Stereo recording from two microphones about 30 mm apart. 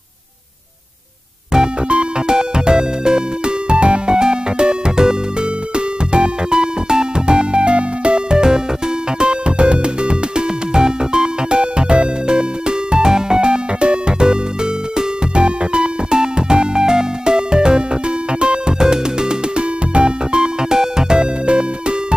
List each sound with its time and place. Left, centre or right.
1.9 s music: right
6.1 s music: right